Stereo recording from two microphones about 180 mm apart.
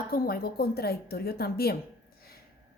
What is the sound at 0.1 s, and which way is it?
A woman's voice, 55° left (ahead or behind).